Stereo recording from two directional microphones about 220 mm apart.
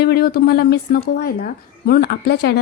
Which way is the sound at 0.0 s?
45° left (ahead or behind).